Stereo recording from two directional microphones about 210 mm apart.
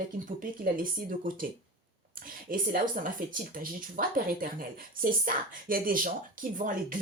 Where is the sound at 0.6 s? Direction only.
40° right (ahead or behind).